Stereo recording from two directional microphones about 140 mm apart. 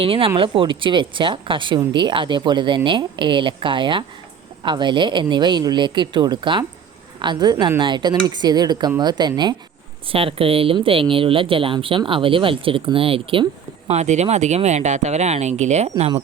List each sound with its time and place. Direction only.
0.0 s speech: 40° right (ahead or behind)